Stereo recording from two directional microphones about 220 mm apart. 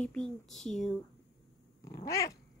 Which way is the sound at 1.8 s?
15° left (ahead or behind).